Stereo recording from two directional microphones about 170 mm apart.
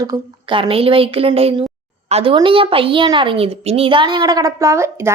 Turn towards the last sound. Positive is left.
turn(degrees=-15)  # may be behind; listen again after turning